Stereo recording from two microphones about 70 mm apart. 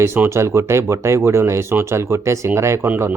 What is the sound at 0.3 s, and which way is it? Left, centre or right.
A man's voice, right.